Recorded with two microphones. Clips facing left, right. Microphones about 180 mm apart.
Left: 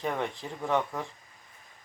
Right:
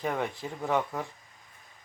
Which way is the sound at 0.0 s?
5° right (ahead or behind).